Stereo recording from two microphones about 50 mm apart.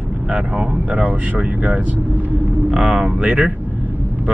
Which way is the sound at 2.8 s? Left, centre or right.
Centre.